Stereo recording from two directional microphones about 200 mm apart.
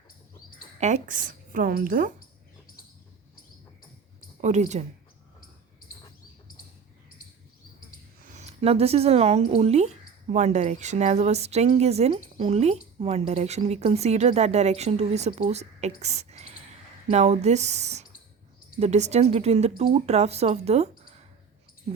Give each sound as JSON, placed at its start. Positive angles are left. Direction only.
{"t": 0.8, "sound": "speech", "side_deg": -35}
{"t": 4.4, "sound": "speech", "side_deg": -35}
{"t": 8.3, "sound": "speech", "side_deg": -35}